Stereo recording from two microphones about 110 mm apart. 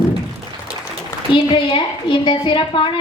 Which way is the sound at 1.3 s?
50° left (ahead or behind).